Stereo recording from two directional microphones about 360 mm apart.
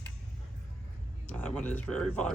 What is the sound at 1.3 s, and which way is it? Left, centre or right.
Speech, centre.